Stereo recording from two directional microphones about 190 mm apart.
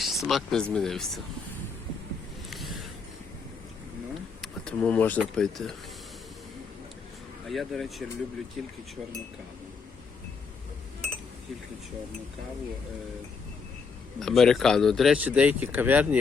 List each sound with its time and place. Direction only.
0.0 s speech: centre (ahead or behind)
2.5 s a sound: centre (ahead or behind)
4.4 s speech: 5° left (ahead or behind)
7.4 s speech: centre (ahead or behind)
14.2 s speech: centre (ahead or behind)